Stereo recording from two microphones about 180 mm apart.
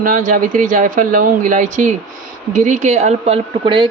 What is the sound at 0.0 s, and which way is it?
A woman's voice, 45° right (ahead or behind).